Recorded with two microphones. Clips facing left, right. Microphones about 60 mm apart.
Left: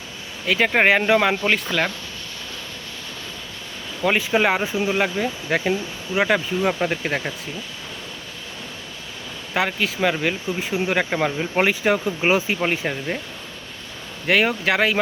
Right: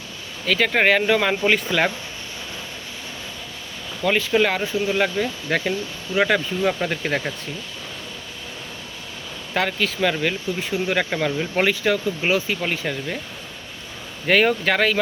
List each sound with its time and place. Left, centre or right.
0.4 s speech: centre
1.4 s speech: centre
4.0 s speech: centre
9.6 s speech: centre
14.3 s speech: centre